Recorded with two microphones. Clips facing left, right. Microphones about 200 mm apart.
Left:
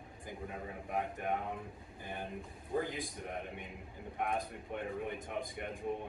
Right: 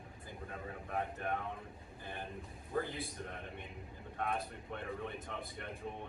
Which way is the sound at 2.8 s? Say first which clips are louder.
Left 2 dB; 15° left (ahead or behind).